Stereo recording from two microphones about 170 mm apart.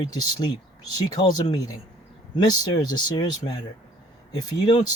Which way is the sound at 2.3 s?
25° left (ahead or behind).